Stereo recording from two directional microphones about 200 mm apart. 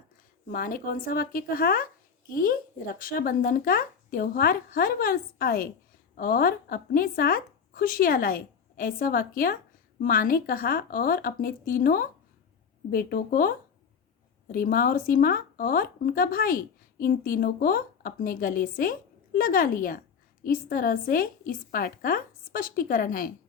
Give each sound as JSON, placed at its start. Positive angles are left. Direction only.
{"t": 0.4, "sound": "speech", "side_deg": 45}